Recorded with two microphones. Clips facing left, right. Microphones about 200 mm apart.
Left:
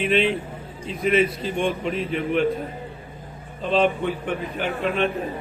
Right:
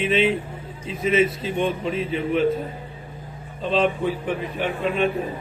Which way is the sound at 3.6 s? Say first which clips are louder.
Even; centre (ahead or behind).